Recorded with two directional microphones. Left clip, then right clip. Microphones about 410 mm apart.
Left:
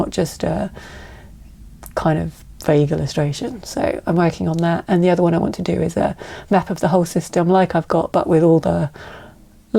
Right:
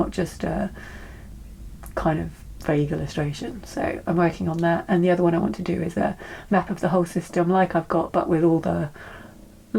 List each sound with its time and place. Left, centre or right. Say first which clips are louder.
0.1 s speech: left 6 dB; left
1.9 s speech: left 5 dB; left